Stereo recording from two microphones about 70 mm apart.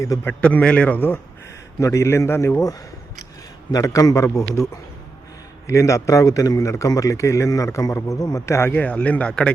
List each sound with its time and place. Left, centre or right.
0.1 s speech: left
0.4 s speech: centre
1.8 s a man's voice: left
2.6 s a man's voice: left
8.7 s speech: left